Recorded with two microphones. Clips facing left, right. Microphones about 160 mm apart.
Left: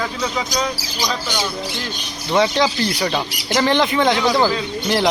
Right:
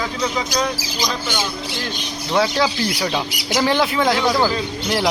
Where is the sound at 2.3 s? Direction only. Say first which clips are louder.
Left 2 dB; centre (ahead or behind).